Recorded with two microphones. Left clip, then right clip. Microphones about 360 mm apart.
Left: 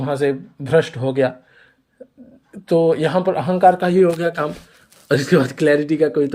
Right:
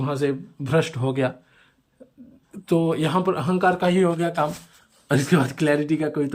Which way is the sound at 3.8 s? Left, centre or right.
Centre.